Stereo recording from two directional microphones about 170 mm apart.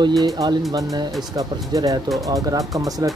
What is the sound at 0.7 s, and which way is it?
Speech, 20° right (ahead or behind).